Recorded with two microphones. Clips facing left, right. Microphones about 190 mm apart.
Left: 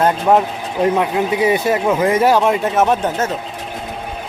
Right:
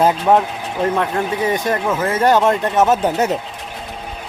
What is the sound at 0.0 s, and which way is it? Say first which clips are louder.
Speech: even; centre (ahead or behind).